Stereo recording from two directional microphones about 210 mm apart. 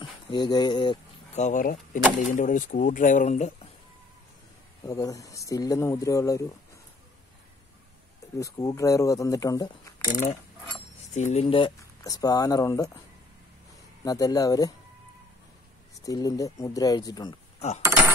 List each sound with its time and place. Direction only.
0.0 s a sound: 20° left (ahead or behind)
1.4 s speech: 40° left (ahead or behind)
4.8 s speech: 15° left (ahead or behind)
8.4 s speech: 15° left (ahead or behind)
11.1 s speech: 30° left (ahead or behind); by 13.0 s 15° left (ahead or behind)
14.0 s speech: 15° left (ahead or behind)
16.1 s speech: 15° left (ahead or behind)
17.6 s speech: 30° left (ahead or behind)